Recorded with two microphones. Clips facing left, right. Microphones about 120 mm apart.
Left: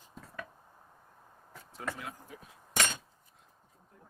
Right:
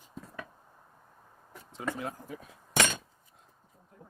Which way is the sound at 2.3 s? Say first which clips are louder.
Right 6 dB; 75° right (ahead or behind).